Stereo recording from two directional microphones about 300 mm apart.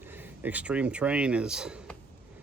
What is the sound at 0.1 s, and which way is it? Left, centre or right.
Speech, centre.